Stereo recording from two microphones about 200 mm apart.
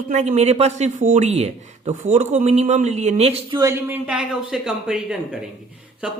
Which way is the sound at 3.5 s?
15° right (ahead or behind).